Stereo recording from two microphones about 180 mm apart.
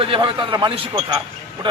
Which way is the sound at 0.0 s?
30° right (ahead or behind).